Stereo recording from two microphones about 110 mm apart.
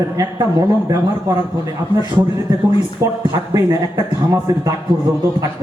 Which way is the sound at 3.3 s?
30° right (ahead or behind).